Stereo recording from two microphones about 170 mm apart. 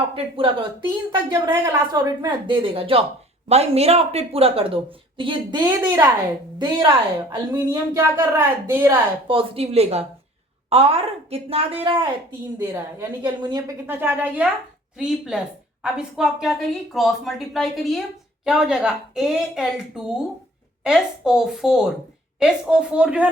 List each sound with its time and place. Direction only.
0.0 s a woman's voice: 30° right (ahead or behind)
1.3 s a woman's voice: 15° right (ahead or behind)
5.6 s speech: 15° right (ahead or behind)
6.6 s speech: 30° right (ahead or behind)
9.2 s a woman's voice: 30° right (ahead or behind)
12.5 s a woman's voice: 15° right (ahead or behind)